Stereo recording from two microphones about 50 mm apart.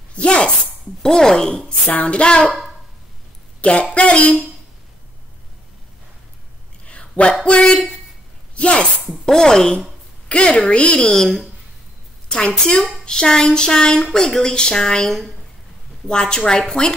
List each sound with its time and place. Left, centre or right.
0.1 s speech: left
1.0 s a woman's voice: centre
1.9 s a woman's voice: left
3.9 s a woman's voice: left
6.9 s a sound: left
7.4 s a woman's voice: left
9.2 s a woman's voice: centre
12.3 s a woman's voice: centre